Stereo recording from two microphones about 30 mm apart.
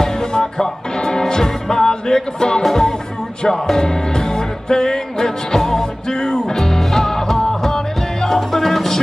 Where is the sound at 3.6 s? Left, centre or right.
Centre.